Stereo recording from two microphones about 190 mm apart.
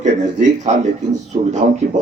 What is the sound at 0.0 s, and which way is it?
Speech, 40° right (ahead or behind).